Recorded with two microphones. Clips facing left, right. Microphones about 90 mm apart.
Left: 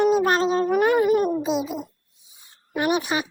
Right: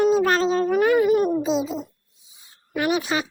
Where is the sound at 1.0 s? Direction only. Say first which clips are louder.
Right 1 dB; 40° left (ahead or behind).